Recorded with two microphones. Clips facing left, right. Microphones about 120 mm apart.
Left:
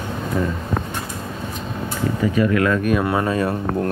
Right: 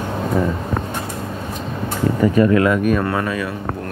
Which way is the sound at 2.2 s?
45° right (ahead or behind).